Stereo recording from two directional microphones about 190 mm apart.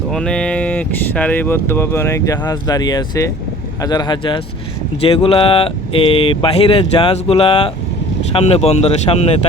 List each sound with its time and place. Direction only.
0.1 s speech: 5° left (ahead or behind); by 9.3 s 35° left (ahead or behind)